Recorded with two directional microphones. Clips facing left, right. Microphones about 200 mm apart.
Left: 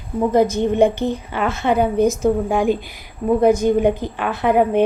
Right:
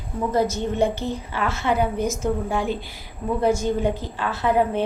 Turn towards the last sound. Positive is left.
turn(degrees=15)  # may be behind; listen again after turning